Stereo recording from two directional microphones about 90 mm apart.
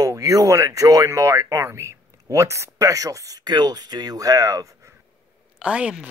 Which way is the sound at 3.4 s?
50° right (ahead or behind).